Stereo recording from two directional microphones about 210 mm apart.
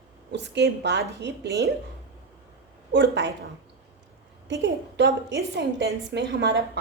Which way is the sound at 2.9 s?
55° right (ahead or behind).